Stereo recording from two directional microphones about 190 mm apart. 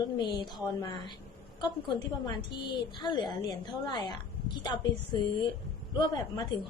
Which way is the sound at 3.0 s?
25° left (ahead or behind).